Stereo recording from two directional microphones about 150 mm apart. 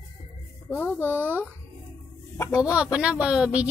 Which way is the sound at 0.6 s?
10° left (ahead or behind).